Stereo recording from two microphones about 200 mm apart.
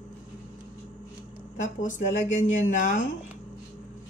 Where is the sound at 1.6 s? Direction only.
40° left (ahead or behind).